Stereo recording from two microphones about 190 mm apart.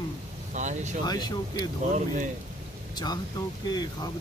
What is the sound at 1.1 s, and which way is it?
Speech, 20° left (ahead or behind).